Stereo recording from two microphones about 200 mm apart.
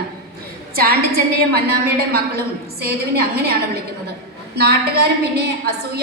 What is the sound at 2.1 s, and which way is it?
A woman's voice, 50° right (ahead or behind).